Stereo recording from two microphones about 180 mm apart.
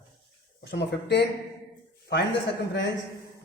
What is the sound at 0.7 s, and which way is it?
A man's voice, 70° left (ahead or behind).